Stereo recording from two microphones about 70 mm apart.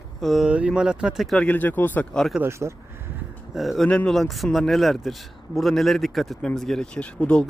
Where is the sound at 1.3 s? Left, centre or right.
Left.